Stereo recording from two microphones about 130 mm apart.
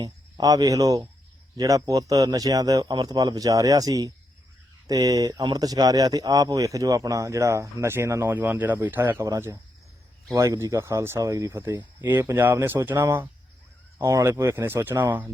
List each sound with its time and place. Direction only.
0.0 s speech: 30° right (ahead or behind)